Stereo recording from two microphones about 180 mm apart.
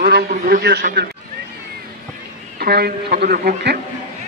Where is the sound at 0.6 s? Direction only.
65° right (ahead or behind).